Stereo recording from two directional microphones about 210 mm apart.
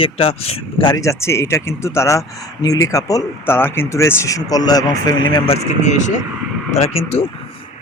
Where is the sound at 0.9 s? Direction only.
15° left (ahead or behind); by 7.3 s 30° left (ahead or behind).